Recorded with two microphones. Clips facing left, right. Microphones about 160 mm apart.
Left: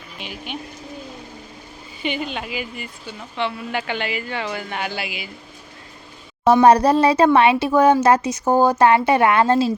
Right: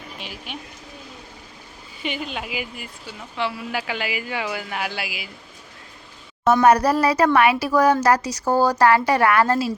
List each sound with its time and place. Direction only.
0.2 s speech: centre (ahead or behind)
2.0 s speech: centre (ahead or behind)
6.4 s a woman's voice: 30° left (ahead or behind)